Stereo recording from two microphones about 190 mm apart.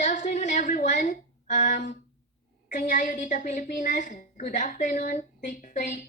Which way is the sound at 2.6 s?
40° left (ahead or behind).